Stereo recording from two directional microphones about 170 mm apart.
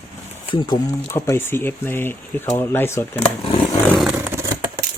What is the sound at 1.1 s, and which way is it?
Speech, 15° left (ahead or behind).